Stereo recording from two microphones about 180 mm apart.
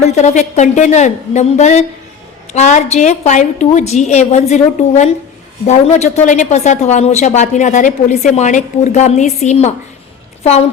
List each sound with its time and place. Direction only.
0.0 s speech: 40° left (ahead or behind)